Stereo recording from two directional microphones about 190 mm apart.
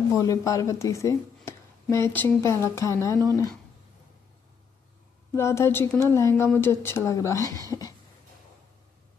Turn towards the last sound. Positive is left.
turn(degrees=20)  # may be behind; listen again after turning